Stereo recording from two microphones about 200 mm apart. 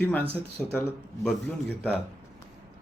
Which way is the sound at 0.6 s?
Centre (ahead or behind).